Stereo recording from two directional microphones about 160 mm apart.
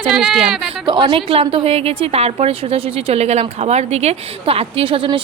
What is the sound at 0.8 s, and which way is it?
A woman's voice, 30° right (ahead or behind).